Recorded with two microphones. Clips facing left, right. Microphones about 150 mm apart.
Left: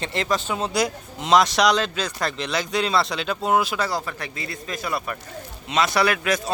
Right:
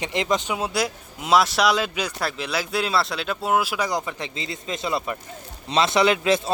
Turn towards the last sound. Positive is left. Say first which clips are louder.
# right 3 dB
turn(degrees=-25)  # may be behind; listen again after turning